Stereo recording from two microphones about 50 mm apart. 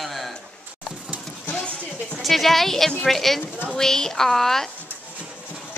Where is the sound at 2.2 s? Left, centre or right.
Centre.